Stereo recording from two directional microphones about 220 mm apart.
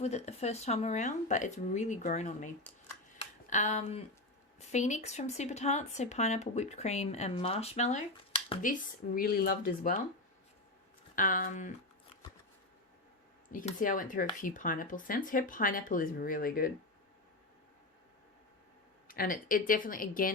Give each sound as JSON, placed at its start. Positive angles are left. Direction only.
{"t": 0.0, "sound": "speech", "side_deg": 30}
{"t": 3.2, "sound": "a sound", "side_deg": 35}
{"t": 4.7, "sound": "speech", "side_deg": 30}
{"t": 9.1, "sound": "speech", "side_deg": 40}
{"t": 11.1, "sound": "speech", "side_deg": 40}
{"t": 13.5, "sound": "speech", "side_deg": 35}
{"t": 19.0, "sound": "speech", "side_deg": 40}